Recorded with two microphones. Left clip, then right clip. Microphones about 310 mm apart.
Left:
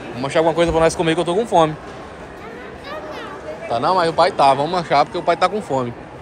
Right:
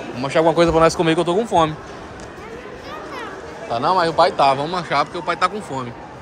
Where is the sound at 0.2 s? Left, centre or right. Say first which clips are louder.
Right 1 dB; centre.